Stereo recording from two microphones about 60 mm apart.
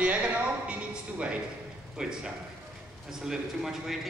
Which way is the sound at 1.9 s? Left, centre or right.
Centre.